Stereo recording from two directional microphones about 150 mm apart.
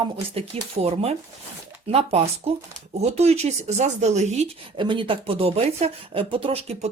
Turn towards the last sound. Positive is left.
turn(degrees=-40)  # may be behind; listen again after turning